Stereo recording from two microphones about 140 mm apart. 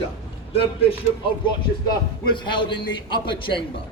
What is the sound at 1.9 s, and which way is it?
A man's voice, 35° left (ahead or behind).